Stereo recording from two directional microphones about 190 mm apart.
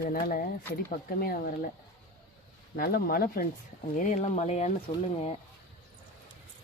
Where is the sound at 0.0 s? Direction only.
50° left (ahead or behind).